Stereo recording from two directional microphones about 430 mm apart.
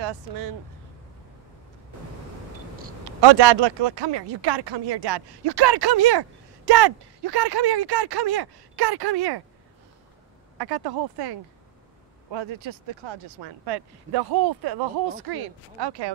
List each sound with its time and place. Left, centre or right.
3.2 s speech: right
10.6 s speech: right